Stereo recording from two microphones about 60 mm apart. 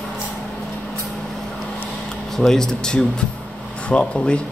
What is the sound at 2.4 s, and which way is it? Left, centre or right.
Speech, centre.